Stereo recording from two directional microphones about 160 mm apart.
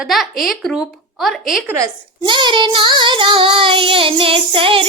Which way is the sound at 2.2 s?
30° right (ahead or behind).